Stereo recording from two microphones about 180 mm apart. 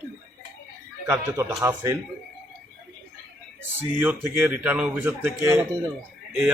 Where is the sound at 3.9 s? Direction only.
10° right (ahead or behind).